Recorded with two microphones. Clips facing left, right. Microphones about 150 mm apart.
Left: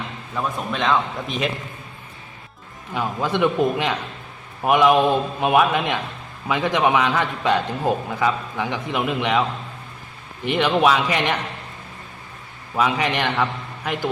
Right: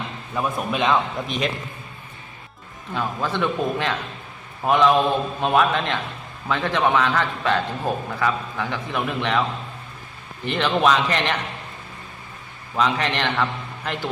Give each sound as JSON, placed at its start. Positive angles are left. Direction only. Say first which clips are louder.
{"t": 0.3, "sound": "a man's voice", "louder": "right 1 dB", "side_deg": -10}
{"t": 2.9, "sound": "a man's voice", "louder": "left 2 dB", "side_deg": 15}
{"t": 10.4, "sound": "a man's voice", "louder": "left 2 dB", "side_deg": 15}
{"t": 12.7, "sound": "a man's voice", "louder": "left 1 dB", "side_deg": 10}